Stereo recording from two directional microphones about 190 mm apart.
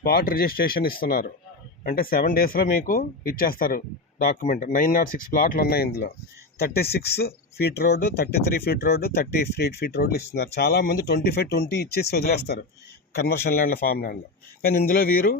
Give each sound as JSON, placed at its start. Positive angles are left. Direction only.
{"t": 0.0, "sound": "speech", "side_deg": 50}